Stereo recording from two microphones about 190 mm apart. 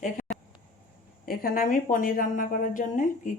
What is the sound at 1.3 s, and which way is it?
Speech, 50° left (ahead or behind).